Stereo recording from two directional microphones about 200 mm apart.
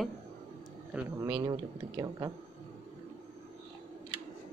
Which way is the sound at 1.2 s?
20° right (ahead or behind).